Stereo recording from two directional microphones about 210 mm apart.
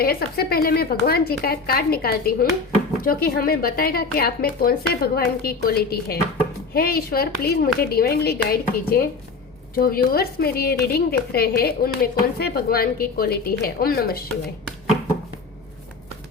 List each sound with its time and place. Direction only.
0.0 s speech: 45° left (ahead or behind)